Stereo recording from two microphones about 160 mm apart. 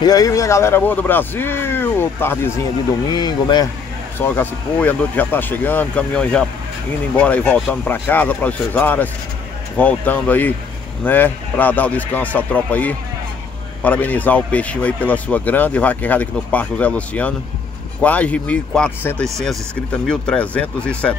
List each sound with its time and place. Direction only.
0.0 s speech: 25° left (ahead or behind)
3.1 s speech: 25° left (ahead or behind)
4.2 s speech: 10° left (ahead or behind)